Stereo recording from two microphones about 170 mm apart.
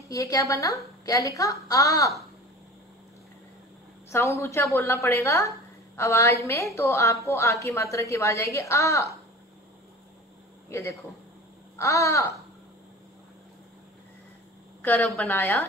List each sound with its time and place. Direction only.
0.1 s a woman's voice: 20° left (ahead or behind)
4.1 s a woman's voice: 15° left (ahead or behind)
10.7 s a woman's voice: 15° left (ahead or behind)
14.8 s a woman's voice: 5° left (ahead or behind)